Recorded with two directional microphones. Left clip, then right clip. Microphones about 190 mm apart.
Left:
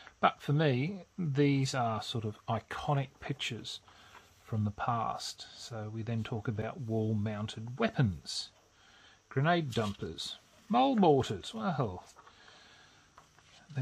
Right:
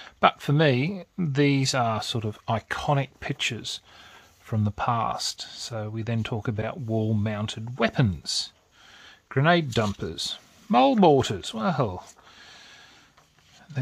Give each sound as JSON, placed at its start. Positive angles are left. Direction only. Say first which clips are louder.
{"t": 0.0, "sound": "speech", "louder": "right 8 dB", "side_deg": -35}